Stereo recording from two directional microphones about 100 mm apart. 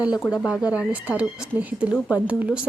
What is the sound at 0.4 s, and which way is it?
A woman's voice, 10° right (ahead or behind).